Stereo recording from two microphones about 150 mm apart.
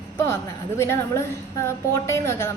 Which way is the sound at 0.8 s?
15° left (ahead or behind).